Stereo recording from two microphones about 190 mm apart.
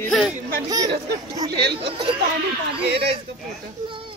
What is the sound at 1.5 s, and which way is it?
Speech, 60° right (ahead or behind).